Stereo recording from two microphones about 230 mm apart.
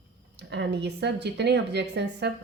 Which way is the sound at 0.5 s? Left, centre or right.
Right.